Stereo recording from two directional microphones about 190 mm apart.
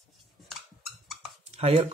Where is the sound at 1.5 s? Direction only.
35° right (ahead or behind).